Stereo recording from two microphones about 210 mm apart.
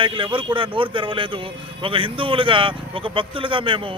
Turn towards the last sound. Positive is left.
turn(degrees=-25)  # may be behind; listen again after turning